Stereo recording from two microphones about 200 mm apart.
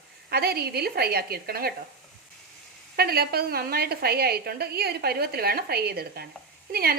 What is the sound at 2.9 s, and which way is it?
A woman's voice, 50° right (ahead or behind).